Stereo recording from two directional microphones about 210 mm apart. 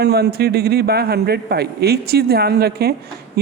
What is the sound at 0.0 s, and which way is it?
A woman's voice, 50° right (ahead or behind).